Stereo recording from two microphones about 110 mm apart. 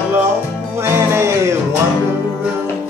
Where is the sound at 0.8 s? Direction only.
20° right (ahead or behind).